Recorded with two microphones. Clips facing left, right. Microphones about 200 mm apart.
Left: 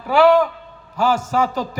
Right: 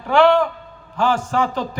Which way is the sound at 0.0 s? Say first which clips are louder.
Left 1 dB; 5° left (ahead or behind).